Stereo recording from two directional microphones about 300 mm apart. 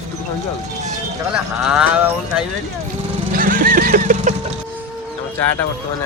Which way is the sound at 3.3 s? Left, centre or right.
Right.